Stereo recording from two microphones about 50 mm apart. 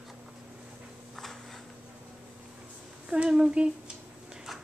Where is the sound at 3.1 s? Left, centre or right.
Centre.